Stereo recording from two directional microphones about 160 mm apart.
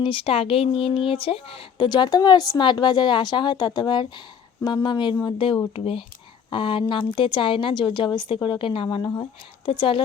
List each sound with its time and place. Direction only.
0.0 s speech: 35° left (ahead or behind)